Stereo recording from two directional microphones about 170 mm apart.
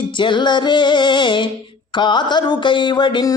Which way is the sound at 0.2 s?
25° left (ahead or behind).